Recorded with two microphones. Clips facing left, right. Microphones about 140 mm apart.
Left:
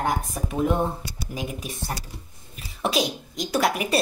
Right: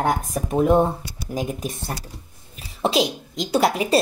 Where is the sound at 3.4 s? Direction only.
25° right (ahead or behind).